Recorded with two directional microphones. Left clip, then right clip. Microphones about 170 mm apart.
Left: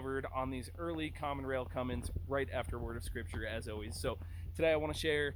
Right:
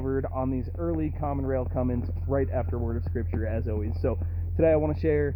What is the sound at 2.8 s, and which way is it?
Speech, 35° left (ahead or behind).